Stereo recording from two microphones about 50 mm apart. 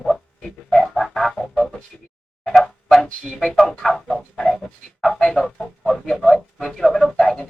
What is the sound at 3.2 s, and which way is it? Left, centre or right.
Speech, centre.